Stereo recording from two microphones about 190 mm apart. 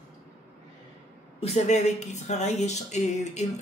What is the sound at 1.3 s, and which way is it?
Speech, 35° left (ahead or behind).